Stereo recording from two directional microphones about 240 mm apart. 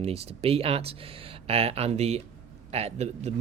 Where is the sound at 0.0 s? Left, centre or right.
Right.